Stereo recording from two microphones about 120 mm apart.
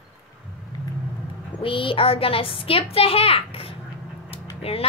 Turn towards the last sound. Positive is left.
turn(degrees=55)  # may be behind; listen again after turning